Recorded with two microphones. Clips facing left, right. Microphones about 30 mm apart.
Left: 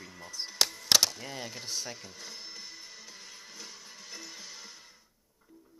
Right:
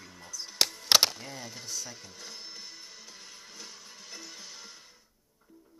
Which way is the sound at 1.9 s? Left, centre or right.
Centre.